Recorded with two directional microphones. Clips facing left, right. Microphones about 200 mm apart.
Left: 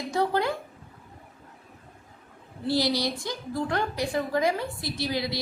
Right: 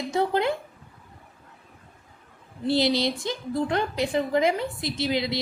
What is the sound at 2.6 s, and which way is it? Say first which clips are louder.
A woman's voice: right 3 dB; 25° right (ahead or behind).